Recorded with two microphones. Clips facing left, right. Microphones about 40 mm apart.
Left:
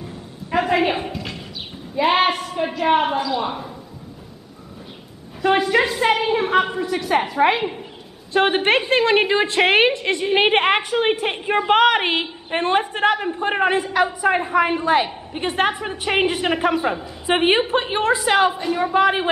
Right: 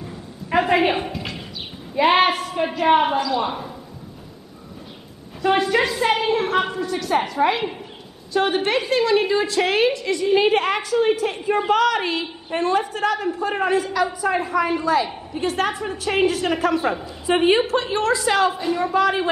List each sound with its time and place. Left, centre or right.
0.6 s a woman's voice: centre
5.4 s a woman's voice: centre
8.3 s a woman's voice: left
14.0 s a woman's voice: left
17.0 s a woman's voice: left
17.6 s a woman's voice: centre
18.5 s a woman's voice: centre
18.9 s a woman's voice: left